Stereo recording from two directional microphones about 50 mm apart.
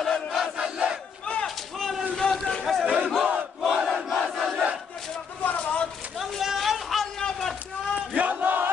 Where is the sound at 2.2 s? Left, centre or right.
Centre.